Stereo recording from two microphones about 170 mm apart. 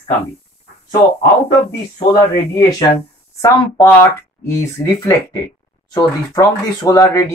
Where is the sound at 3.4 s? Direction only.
15° left (ahead or behind).